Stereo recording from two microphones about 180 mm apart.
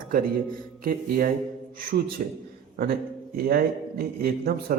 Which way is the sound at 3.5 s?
55° right (ahead or behind).